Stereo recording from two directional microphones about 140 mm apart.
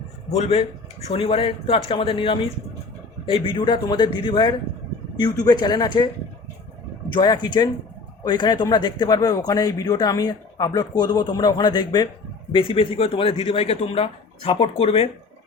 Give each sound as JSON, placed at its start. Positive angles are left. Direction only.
{"t": 0.3, "sound": "speech", "side_deg": 45}
{"t": 7.1, "sound": "a man's voice", "side_deg": 35}